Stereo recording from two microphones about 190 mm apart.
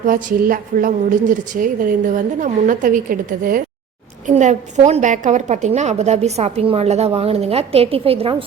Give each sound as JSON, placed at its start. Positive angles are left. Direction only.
{"t": 0.0, "sound": "a woman's voice", "side_deg": -45}